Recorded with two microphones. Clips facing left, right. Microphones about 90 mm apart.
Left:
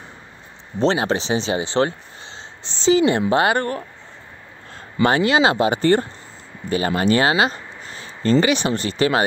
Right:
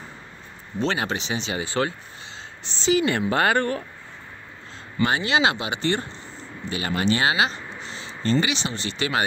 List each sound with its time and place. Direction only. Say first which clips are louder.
0.7 s speech: left 6 dB; 35° left (ahead or behind)
2.6 s a sound: left 5 dB; 30° left (ahead or behind)
3.1 s speech: left 4 dB; 20° left (ahead or behind)
5.0 s speech: left 5 dB; 45° left (ahead or behind)